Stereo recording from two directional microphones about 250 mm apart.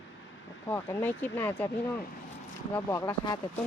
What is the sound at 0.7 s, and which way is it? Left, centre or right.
Speech, centre.